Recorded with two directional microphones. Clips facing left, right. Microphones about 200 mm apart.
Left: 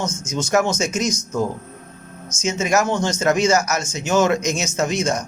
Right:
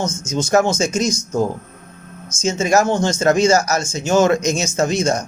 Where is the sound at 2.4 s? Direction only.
30° right (ahead or behind).